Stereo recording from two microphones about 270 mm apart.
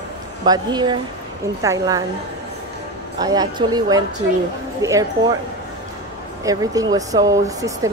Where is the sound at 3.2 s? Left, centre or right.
Centre.